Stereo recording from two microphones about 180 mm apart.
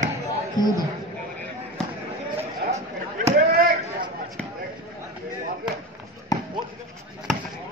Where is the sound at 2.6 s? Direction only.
55° right (ahead or behind).